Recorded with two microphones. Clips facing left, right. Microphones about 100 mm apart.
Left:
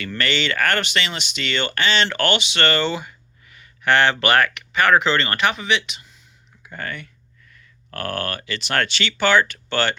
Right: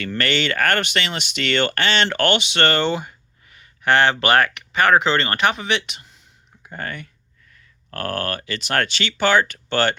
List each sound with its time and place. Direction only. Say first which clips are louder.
0.2 s speech: right 1 dB; 50° right (ahead or behind)
5.6 s speech: left 1 dB; 50° right (ahead or behind)
6.7 s speech: right 1 dB; 40° right (ahead or behind)